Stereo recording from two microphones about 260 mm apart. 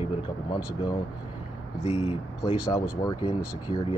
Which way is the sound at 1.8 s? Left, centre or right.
Left.